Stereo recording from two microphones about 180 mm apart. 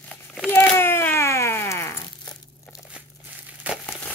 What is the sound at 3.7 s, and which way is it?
Crumpling, 10° right (ahead or behind).